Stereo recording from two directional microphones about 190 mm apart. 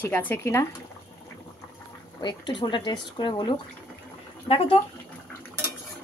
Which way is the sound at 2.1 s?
25° left (ahead or behind).